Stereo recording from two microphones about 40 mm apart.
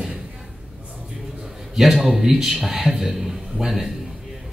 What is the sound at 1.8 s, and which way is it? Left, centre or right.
A man's voice, centre.